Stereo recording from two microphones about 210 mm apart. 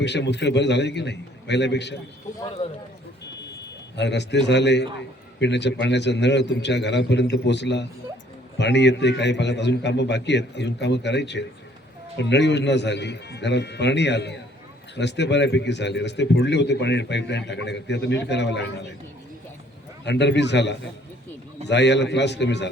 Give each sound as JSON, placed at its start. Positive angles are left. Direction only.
{"t": 0.0, "sound": "speech", "side_deg": 55}
{"t": 3.9, "sound": "speech", "side_deg": 55}
{"t": 20.1, "sound": "speech", "side_deg": 55}